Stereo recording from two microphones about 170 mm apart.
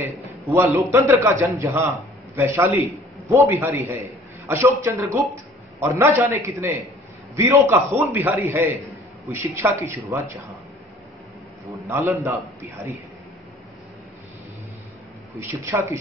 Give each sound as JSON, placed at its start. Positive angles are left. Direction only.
{"t": 0.0, "sound": "a man's voice", "side_deg": -15}
{"t": 11.9, "sound": "a man's voice", "side_deg": -15}
{"t": 15.6, "sound": "a man's voice", "side_deg": -15}